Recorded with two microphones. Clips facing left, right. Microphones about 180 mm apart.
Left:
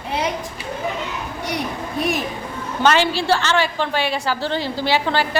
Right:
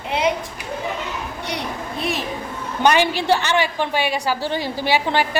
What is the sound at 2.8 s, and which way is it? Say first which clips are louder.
A woman's voice: even; 15° right (ahead or behind).